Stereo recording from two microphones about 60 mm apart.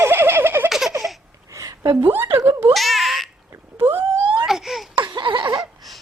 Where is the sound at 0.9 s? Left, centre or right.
Right.